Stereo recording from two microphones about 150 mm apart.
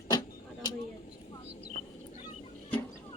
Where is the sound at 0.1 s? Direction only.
25° left (ahead or behind).